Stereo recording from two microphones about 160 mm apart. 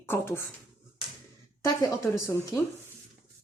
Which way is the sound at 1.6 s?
20° left (ahead or behind).